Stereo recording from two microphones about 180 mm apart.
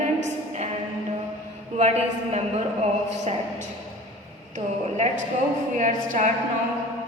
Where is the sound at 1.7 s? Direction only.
40° right (ahead or behind).